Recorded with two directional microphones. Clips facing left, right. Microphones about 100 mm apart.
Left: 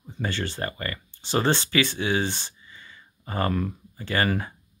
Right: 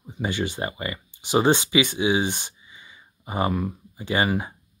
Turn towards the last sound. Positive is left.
turn(degrees=-15)  # may be behind; listen again after turning